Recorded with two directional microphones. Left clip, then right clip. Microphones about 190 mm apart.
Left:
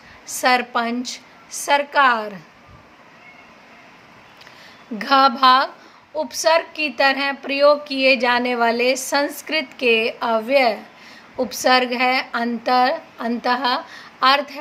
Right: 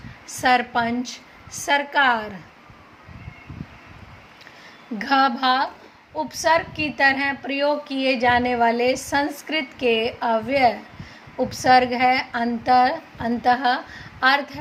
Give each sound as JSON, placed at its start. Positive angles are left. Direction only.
{"t": 0.3, "sound": "a woman's voice", "side_deg": 15}
{"t": 4.9, "sound": "a woman's voice", "side_deg": 20}